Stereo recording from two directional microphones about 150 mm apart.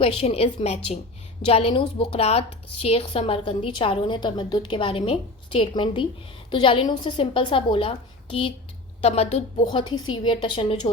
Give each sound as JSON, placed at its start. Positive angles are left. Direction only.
{"t": 0.0, "sound": "a woman's voice", "side_deg": 40}
{"t": 9.7, "sound": "a woman's voice", "side_deg": 30}